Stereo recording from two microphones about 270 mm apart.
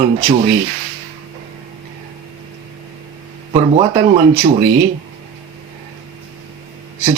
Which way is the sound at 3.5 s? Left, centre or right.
Centre.